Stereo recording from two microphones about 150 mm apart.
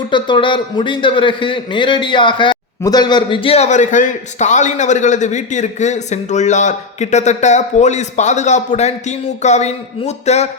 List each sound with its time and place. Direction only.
0.1 s a man's voice: 35° left (ahead or behind)